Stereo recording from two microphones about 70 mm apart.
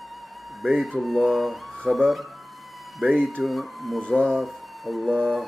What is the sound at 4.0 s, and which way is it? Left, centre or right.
Speech, centre.